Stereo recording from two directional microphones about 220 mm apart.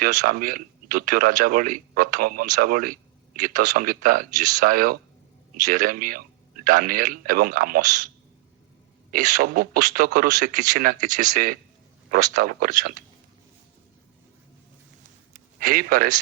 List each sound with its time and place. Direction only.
0.0 s speech: 40° right (ahead or behind)
9.1 s speech: 35° right (ahead or behind)
15.6 s speech: 40° right (ahead or behind)